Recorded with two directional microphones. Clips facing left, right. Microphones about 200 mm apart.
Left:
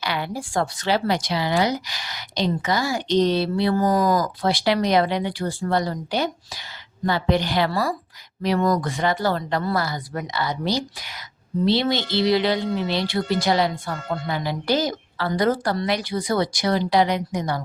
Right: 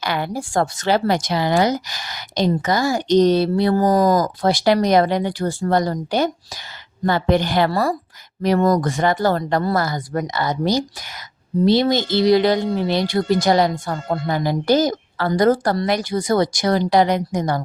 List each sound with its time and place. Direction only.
0.0 s speech: 45° right (ahead or behind)